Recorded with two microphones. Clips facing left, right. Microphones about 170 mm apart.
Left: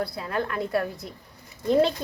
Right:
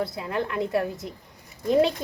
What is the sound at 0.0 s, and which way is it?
A woman's voice, 20° right (ahead or behind).